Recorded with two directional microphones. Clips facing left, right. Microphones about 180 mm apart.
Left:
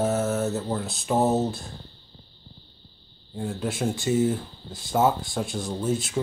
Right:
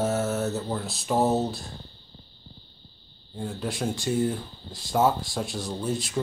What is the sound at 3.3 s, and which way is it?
Speech, centre (ahead or behind).